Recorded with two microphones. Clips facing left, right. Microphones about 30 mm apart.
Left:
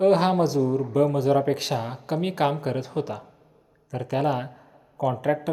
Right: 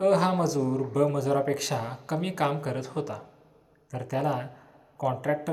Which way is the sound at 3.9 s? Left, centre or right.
Left.